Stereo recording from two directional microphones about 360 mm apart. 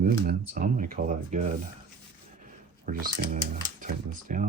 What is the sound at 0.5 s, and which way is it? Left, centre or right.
Speech, right.